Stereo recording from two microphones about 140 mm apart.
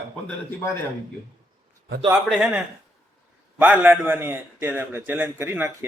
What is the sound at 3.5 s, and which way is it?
A man's voice, 10° right (ahead or behind).